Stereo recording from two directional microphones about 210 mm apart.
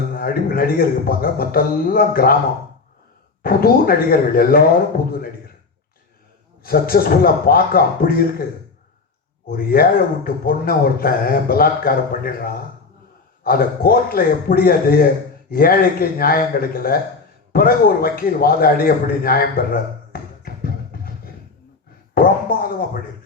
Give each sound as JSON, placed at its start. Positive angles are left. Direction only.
{"t": 0.1, "sound": "a man's voice", "side_deg": 45}
{"t": 3.4, "sound": "a man's voice", "side_deg": 45}
{"t": 6.6, "sound": "a man's voice", "side_deg": 45}
{"t": 9.5, "sound": "a man's voice", "side_deg": 45}
{"t": 20.4, "sound": "music", "side_deg": 45}
{"t": 22.1, "sound": "a sound", "side_deg": 45}